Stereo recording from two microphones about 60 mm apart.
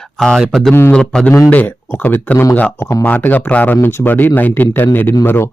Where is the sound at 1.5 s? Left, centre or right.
Left.